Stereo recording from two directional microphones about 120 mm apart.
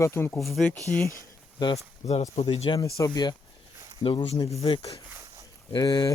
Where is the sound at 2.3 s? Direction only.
60° left (ahead or behind).